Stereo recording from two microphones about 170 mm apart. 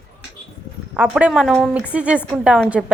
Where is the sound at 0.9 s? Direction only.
10° right (ahead or behind).